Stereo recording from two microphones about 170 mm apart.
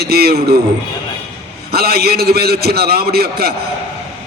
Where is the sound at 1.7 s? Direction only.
65° right (ahead or behind).